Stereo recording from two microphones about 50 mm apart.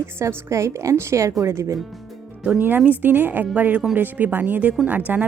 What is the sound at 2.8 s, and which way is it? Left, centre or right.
Speech, right.